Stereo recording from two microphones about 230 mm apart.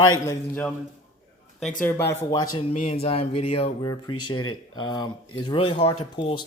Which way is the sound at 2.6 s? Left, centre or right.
Left.